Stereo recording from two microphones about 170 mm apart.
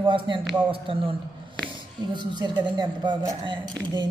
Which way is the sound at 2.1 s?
25° right (ahead or behind).